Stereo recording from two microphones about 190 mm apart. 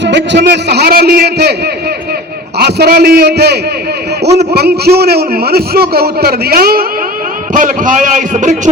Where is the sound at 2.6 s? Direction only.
60° right (ahead or behind).